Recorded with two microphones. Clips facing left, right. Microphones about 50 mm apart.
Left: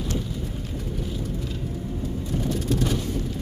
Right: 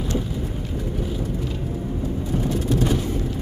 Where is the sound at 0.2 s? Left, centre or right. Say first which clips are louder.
Right 4 dB; centre.